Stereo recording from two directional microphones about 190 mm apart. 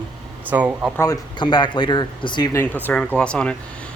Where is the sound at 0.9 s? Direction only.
20° left (ahead or behind).